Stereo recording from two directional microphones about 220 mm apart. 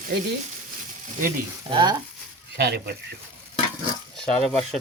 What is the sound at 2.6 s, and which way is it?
Speech, 45° right (ahead or behind).